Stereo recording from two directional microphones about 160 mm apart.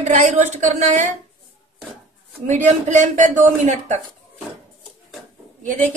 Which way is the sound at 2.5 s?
50° right (ahead or behind).